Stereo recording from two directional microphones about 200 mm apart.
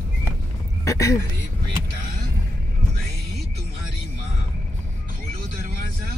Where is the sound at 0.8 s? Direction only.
15° left (ahead or behind).